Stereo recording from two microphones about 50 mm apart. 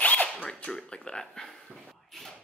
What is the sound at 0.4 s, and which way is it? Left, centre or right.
Speech, centre.